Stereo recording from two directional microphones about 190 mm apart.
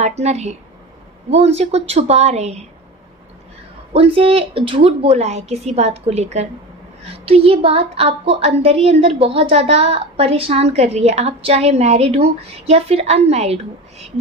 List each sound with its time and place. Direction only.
0.0 s a woman's voice: 35° right (ahead or behind)
3.9 s a woman's voice: 30° right (ahead or behind)